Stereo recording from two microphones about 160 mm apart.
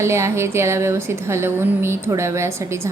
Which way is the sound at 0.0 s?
20° right (ahead or behind).